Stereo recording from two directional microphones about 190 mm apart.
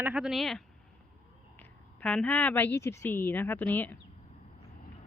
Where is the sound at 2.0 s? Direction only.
5° left (ahead or behind).